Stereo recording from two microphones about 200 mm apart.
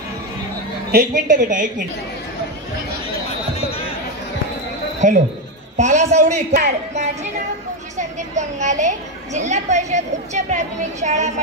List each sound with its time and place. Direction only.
0.9 s a woman's voice: 40° right (ahead or behind)
3.5 s a sound: 30° left (ahead or behind)
5.0 s a woman's voice: 40° right (ahead or behind)